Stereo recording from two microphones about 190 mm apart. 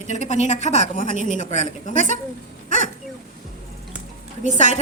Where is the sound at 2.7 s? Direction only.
40° left (ahead or behind).